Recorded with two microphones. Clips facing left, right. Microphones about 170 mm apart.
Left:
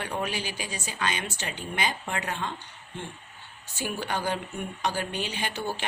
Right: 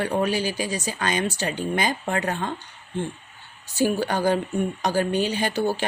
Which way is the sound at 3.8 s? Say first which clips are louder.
Right 9 dB; 40° right (ahead or behind).